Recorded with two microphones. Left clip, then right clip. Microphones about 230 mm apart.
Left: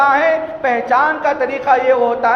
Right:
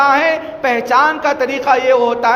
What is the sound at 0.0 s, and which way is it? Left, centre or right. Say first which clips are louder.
Speech: even; right.